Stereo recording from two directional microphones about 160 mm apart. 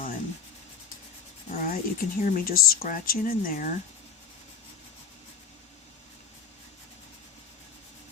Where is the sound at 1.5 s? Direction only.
60° left (ahead or behind).